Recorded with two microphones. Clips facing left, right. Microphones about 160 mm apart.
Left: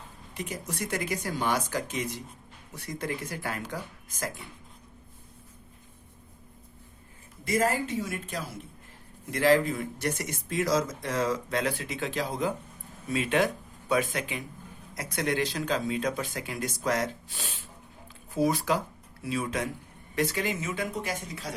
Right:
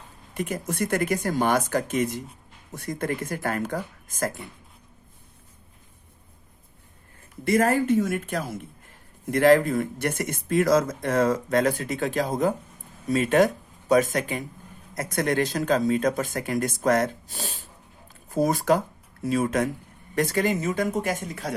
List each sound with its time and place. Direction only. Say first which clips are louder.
0.3 s speech: right 7 dB; 55° right (ahead or behind)
7.4 s a woman's voice: right 6 dB; 60° right (ahead or behind)